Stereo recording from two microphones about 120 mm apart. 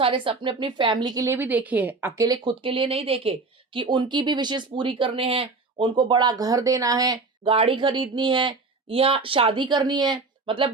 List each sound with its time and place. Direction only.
0.0 s speech: 45° right (ahead or behind)
1.2 s a woman's voice: 20° right (ahead or behind)
2.1 s speech: 30° right (ahead or behind)
7.4 s speech: 50° right (ahead or behind)